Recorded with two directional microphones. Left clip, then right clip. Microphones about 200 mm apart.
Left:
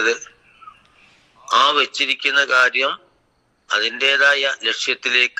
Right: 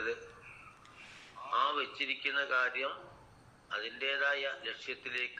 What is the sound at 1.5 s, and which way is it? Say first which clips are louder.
Speech: left 17 dB; 55° left (ahead or behind).